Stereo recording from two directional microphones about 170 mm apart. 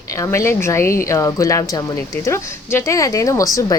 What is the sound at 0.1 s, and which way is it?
A woman's voice, 20° left (ahead or behind).